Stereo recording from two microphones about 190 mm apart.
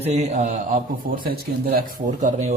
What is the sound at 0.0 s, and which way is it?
A man's voice, 35° right (ahead or behind).